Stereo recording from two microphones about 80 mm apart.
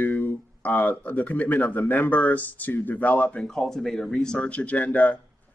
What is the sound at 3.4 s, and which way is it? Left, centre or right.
Speech, centre.